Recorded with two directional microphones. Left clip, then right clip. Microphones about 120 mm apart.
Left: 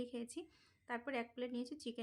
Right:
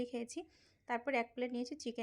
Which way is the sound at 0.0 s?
30° right (ahead or behind).